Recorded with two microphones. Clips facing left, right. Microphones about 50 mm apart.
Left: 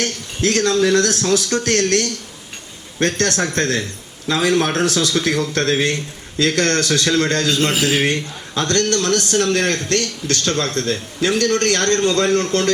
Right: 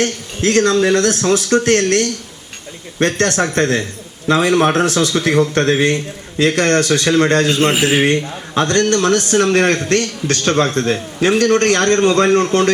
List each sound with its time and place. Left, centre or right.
0.0 s a man's voice: right